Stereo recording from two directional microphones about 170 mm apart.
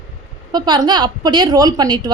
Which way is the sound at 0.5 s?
25° right (ahead or behind).